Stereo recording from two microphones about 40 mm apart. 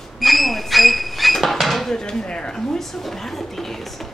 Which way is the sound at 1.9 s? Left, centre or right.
Centre.